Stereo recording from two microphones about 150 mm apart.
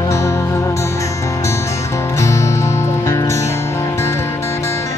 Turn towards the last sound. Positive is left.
turn(degrees=20)  # may be behind; listen again after turning